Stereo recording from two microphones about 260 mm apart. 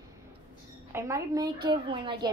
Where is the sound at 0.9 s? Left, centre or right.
Centre.